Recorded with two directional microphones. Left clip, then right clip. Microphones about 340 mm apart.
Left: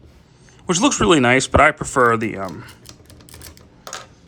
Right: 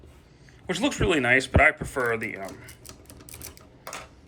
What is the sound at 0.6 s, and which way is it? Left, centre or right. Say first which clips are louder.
Speech: left 9 dB; centre.